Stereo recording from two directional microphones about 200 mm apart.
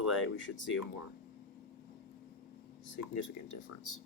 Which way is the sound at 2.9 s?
70° left (ahead or behind).